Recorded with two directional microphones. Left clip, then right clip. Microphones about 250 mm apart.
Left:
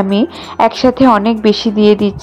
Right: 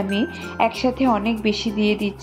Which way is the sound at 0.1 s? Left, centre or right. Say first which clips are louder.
Left 9 dB; left.